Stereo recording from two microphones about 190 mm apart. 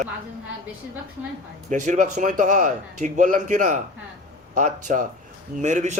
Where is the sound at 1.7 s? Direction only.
40° right (ahead or behind).